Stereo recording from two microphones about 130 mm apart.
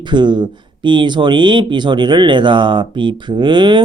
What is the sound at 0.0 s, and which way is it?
Speech, 35° right (ahead or behind).